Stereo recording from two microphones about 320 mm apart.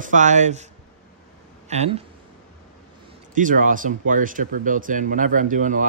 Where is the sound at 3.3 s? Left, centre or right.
Right.